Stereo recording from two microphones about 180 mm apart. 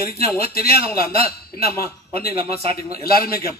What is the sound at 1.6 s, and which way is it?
Speech, 60° left (ahead or behind).